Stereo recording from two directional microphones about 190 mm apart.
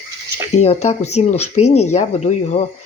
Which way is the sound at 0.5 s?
35° left (ahead or behind).